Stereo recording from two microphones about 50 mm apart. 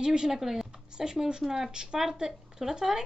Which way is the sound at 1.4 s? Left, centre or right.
Centre.